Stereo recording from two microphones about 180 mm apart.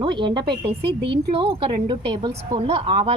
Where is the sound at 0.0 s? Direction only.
25° right (ahead or behind).